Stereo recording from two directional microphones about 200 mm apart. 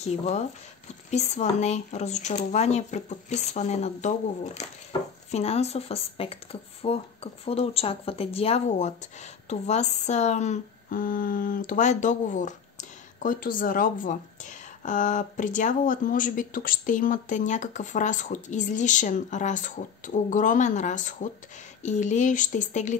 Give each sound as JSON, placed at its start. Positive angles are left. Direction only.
{"t": 0.0, "sound": "speech", "side_deg": 35}